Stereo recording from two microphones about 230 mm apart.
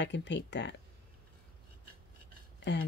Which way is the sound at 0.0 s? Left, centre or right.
Left.